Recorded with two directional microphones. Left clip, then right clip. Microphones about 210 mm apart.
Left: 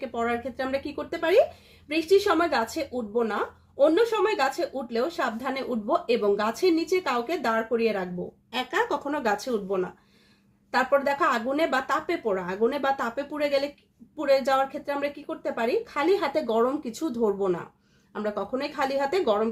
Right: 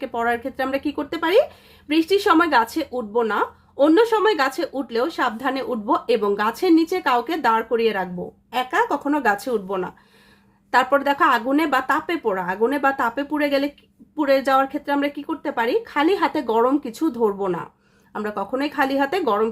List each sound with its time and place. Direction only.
0.0 s speech: 35° right (ahead or behind)